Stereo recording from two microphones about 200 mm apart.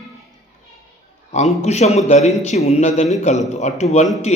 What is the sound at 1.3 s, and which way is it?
Speech, 35° left (ahead or behind).